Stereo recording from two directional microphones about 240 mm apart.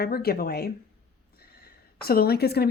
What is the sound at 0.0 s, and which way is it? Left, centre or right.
A woman's voice, left.